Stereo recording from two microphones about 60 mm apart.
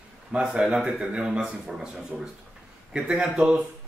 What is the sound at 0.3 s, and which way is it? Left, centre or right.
Speech, centre.